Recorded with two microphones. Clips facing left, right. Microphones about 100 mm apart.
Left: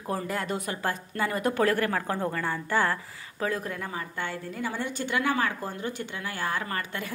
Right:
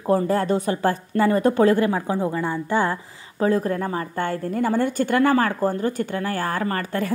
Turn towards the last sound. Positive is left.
turn(degrees=-40)  # may be behind; listen again after turning